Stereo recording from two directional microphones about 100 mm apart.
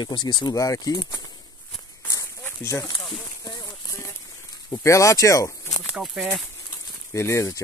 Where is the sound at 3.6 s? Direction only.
30° left (ahead or behind).